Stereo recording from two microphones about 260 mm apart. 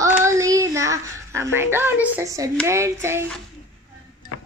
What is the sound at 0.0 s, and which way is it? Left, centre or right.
Child singing, centre.